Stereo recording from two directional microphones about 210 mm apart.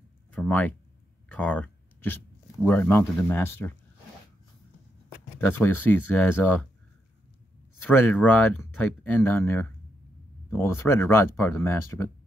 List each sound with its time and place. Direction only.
0.3 s speech: 10° left (ahead or behind)
1.3 s a sound: 5° left (ahead or behind)
2.6 s speech: 10° left (ahead or behind)
5.6 s speech: 10° left (ahead or behind)
7.8 s speech: 10° left (ahead or behind)